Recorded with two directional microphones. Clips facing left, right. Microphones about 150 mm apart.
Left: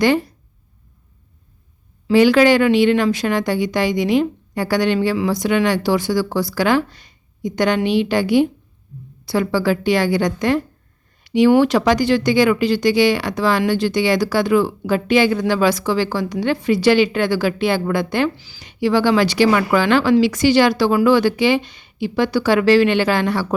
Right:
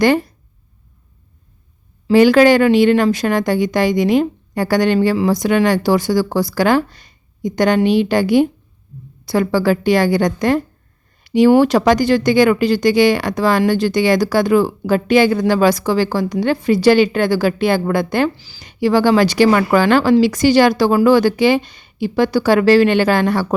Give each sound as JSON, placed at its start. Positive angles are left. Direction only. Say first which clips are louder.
{"t": 2.0, "sound": "speech", "louder": "right 3 dB", "side_deg": -45}